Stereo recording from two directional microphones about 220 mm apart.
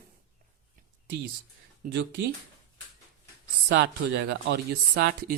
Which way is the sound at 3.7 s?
50° right (ahead or behind).